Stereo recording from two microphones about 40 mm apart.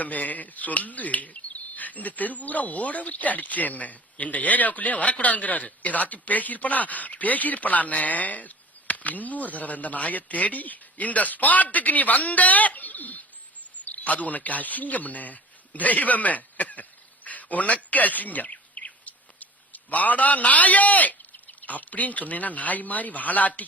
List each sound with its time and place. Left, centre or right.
0.0 s speech: left